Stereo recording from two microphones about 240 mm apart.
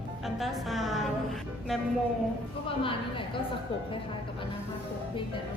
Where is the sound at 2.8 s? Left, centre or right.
Left.